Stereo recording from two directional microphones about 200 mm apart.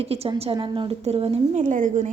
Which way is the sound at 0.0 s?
30° right (ahead or behind).